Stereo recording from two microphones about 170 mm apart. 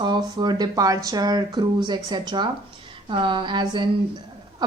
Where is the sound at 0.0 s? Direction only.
25° right (ahead or behind).